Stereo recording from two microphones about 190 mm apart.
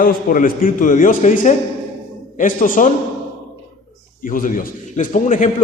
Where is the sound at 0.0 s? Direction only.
45° left (ahead or behind).